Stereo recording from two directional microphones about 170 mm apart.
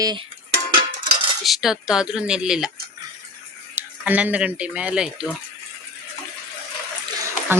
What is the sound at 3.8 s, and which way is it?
Speech, 10° right (ahead or behind).